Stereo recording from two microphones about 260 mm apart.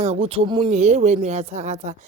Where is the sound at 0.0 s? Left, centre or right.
Right.